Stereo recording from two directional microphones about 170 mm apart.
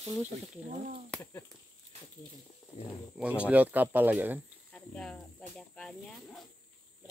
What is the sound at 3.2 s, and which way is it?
Speech, 10° right (ahead or behind).